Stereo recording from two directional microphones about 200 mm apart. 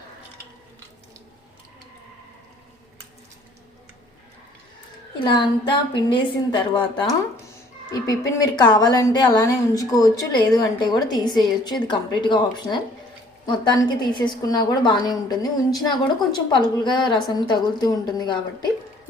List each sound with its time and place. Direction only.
5.2 s a woman's voice: 25° left (ahead or behind)